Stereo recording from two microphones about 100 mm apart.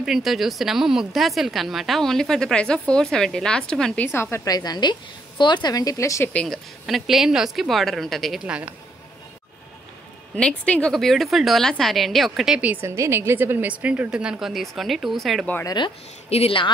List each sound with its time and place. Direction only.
0.0 s a woman's voice: 5° right (ahead or behind)
4.0 s a woman's voice: 25° left (ahead or behind)
4.5 s a woman's voice: 45° left (ahead or behind)
6.3 s speech: 5° left (ahead or behind)
8.5 s a woman's voice: 10° right (ahead or behind)
10.3 s speech: 10° left (ahead or behind)
12.8 s a woman's voice: 30° right (ahead or behind); by 15.4 s centre (ahead or behind)
15.6 s a woman's voice: 45° left (ahead or behind)
16.3 s speech: 80° left